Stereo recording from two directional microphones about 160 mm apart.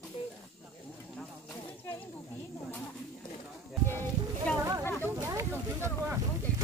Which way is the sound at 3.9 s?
15° left (ahead or behind).